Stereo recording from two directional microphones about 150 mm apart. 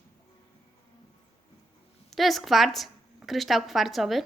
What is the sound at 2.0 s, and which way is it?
A woman's voice, centre (ahead or behind).